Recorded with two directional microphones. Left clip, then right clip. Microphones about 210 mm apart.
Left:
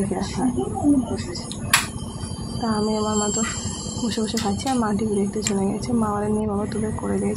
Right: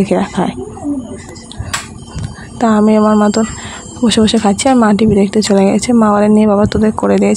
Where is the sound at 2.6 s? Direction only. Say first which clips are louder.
Right 13 dB; 45° right (ahead or behind).